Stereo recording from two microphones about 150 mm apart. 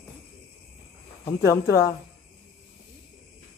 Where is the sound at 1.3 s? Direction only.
20° left (ahead or behind).